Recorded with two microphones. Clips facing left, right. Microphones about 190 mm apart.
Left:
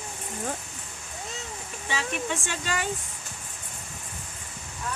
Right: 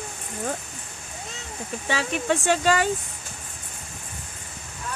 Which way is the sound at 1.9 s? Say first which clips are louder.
Right 5 dB; 75° right (ahead or behind).